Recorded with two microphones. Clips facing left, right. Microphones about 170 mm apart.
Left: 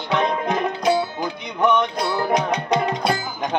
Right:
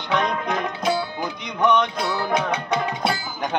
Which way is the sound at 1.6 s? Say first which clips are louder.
Left 1 dB; 10° left (ahead or behind).